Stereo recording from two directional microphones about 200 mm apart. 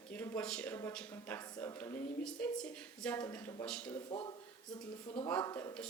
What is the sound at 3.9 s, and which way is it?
Speech, 25° left (ahead or behind).